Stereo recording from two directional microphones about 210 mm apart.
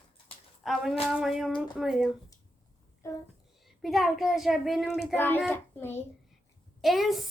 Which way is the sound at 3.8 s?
Centre (ahead or behind).